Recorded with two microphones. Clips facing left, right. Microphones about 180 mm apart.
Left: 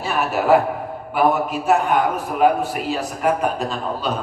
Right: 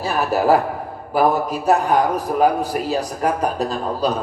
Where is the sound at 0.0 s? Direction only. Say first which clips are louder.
Right 2 dB; 35° right (ahead or behind).